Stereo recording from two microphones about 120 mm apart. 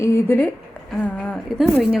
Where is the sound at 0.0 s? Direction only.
20° left (ahead or behind).